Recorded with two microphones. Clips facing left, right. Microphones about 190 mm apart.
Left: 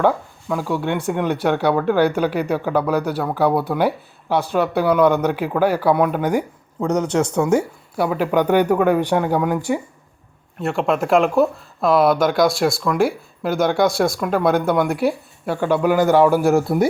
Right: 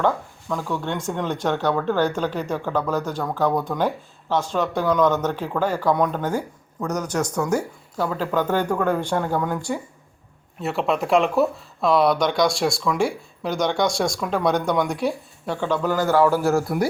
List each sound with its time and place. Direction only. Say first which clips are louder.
0.0 s speech: left 4 dB; 10° left (ahead or behind)
6.7 s speech: left 6 dB; 25° left (ahead or behind)
7.9 s speech: left 5 dB; 15° left (ahead or behind)
10.6 s speech: left 3 dB; centre (ahead or behind); by 16.8 s 20° left (ahead or behind)